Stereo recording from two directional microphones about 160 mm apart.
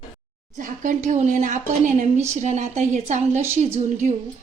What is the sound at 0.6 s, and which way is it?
Speech, 55° right (ahead or behind).